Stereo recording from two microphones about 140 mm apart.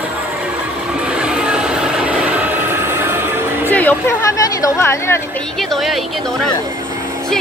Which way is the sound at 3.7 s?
10° left (ahead or behind).